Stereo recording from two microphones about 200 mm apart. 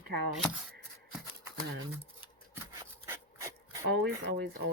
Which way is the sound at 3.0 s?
15° right (ahead or behind).